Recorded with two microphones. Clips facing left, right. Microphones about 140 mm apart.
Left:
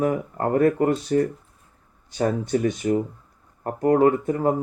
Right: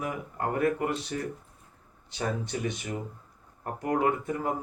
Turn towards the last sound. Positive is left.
turn(degrees=40)  # may be behind; listen again after turning